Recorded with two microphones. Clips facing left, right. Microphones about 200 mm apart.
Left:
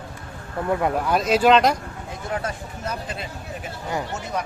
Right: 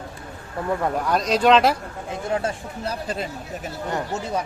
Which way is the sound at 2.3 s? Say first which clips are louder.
Right 3 dB; 25° right (ahead or behind).